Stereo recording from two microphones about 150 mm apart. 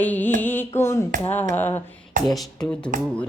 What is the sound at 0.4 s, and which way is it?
Carnatic music, 15° left (ahead or behind).